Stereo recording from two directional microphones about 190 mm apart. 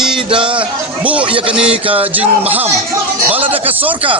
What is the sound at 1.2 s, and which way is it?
Speech, 30° right (ahead or behind).